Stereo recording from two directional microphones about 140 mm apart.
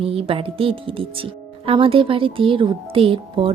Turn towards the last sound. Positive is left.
turn(degrees=-40)  # may be behind; listen again after turning